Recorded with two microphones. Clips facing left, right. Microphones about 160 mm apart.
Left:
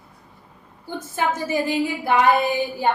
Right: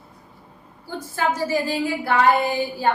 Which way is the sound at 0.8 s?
20° left (ahead or behind).